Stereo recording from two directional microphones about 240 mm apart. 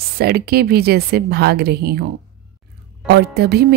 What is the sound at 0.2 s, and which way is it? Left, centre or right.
A woman's voice, right.